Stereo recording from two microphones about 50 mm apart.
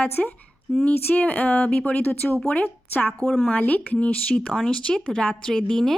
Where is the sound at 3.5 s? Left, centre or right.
Left; by 6.0 s centre.